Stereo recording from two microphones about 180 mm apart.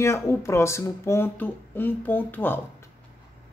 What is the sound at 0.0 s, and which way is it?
Speech, 15° left (ahead or behind).